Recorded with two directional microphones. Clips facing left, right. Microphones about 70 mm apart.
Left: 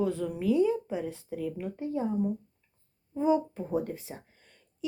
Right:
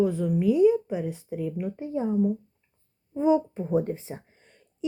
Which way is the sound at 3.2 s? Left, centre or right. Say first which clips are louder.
Right 4 dB; centre.